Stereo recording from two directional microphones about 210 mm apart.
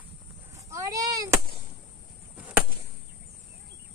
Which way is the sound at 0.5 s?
15° right (ahead or behind).